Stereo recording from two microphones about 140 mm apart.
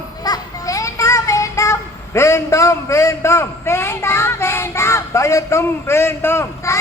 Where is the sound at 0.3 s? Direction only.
25° left (ahead or behind).